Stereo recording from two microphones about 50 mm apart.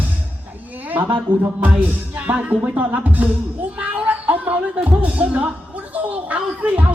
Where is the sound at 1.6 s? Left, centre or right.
Right.